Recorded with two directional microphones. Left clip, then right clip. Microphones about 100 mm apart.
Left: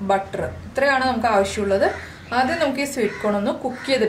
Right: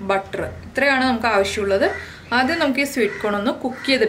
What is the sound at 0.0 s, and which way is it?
A woman's voice, 30° right (ahead or behind).